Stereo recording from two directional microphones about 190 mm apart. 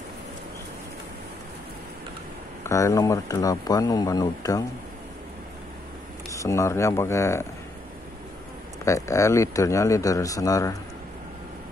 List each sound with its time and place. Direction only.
2.6 s speech: 15° left (ahead or behind)
6.3 s speech: 15° left (ahead or behind)
8.8 s speech: 15° left (ahead or behind)